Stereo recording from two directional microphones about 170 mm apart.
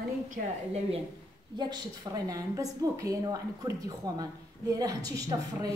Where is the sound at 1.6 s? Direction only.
25° right (ahead or behind).